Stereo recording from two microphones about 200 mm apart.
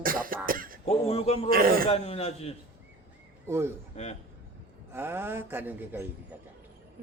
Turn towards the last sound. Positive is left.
turn(degrees=-10)  # may be behind; listen again after turning